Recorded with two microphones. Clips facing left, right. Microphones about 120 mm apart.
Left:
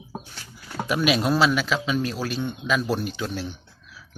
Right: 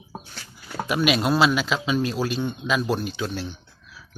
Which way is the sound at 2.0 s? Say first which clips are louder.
Right 2 dB; 25° right (ahead or behind).